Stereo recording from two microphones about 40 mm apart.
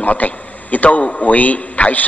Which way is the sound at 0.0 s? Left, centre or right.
Left.